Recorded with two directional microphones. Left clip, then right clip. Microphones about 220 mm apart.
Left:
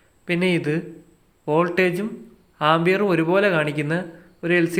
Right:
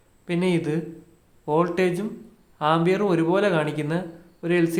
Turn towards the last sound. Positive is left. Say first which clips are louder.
# left 2 dB
turn(degrees=10)  # may be behind; listen again after turning